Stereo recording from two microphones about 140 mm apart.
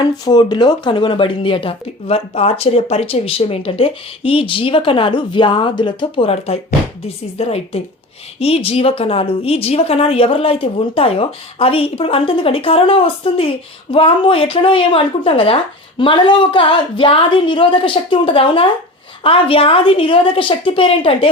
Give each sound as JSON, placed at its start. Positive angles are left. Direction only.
{"t": 0.0, "sound": "a woman's voice", "side_deg": 30}